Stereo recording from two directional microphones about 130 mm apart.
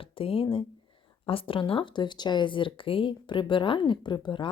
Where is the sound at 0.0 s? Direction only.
45° left (ahead or behind).